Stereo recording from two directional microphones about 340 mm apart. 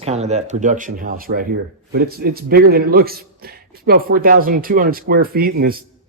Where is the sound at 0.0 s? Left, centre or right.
Centre.